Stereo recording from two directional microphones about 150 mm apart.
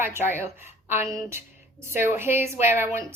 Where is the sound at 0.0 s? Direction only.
15° right (ahead or behind).